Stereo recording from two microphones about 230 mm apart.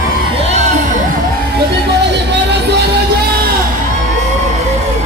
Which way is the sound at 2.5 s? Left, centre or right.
Right.